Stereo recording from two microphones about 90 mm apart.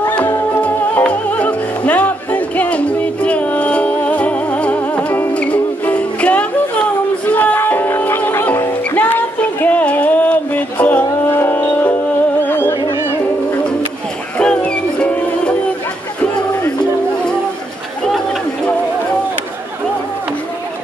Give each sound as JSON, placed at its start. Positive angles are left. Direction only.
{"t": 0.6, "sound": "music", "side_deg": 15}
{"t": 14.4, "sound": "music", "side_deg": 10}